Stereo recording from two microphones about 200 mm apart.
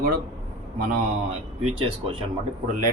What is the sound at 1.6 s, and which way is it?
Speech, 30° right (ahead or behind).